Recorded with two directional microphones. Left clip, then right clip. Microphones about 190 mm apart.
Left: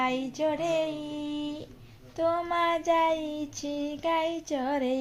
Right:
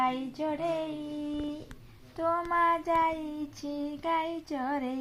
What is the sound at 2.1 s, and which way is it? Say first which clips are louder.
Child singing: left 1 dB; 35° left (ahead or behind).